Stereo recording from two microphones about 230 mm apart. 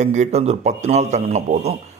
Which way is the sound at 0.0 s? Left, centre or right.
Right.